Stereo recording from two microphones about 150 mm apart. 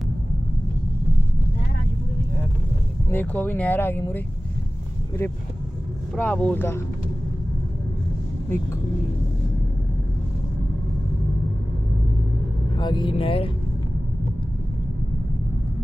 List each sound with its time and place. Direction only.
3.1 s speech: 10° left (ahead or behind)
5.2 s speech: 15° left (ahead or behind)
12.7 s speech: 30° left (ahead or behind)